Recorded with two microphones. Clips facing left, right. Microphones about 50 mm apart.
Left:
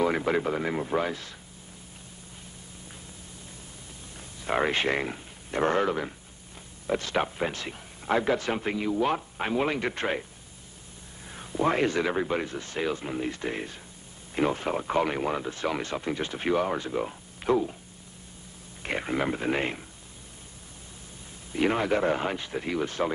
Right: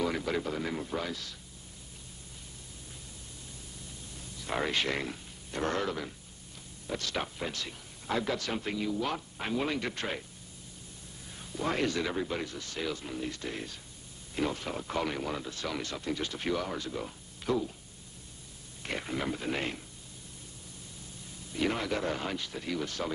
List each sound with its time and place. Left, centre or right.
0.0 s speech: left
4.4 s speech: left
11.2 s speech: left
18.8 s speech: left
21.5 s speech: left